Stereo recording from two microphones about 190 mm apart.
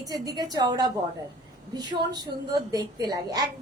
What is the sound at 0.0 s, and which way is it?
A woman's voice, 20° right (ahead or behind).